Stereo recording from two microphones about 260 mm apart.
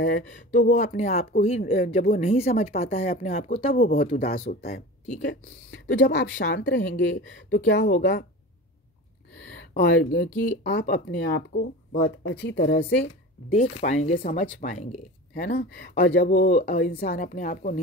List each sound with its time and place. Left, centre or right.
0.0 s speech: left
5.3 s a woman's voice: left
9.8 s speech: left
13.6 s speech: left